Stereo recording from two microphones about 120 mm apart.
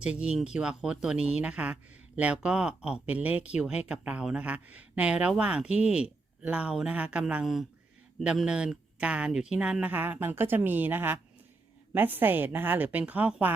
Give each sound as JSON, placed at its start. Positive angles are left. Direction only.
{"t": 0.0, "sound": "speech", "side_deg": -10}